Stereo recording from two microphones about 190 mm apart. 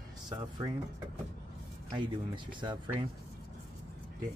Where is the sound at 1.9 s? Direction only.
25° right (ahead or behind).